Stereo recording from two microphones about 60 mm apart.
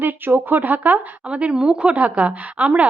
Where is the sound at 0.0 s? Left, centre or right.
Right.